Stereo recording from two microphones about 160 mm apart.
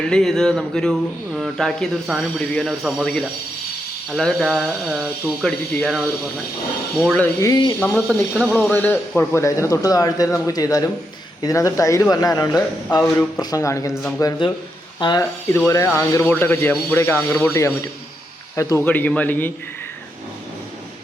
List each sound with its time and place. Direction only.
0.0 s speech: 5° left (ahead or behind)
7.0 s speech: 5° left (ahead or behind)
7.4 s a man's voice: 25° left (ahead or behind)
7.8 s a man's voice: 10° left (ahead or behind)
18.9 s speech: 10° left (ahead or behind)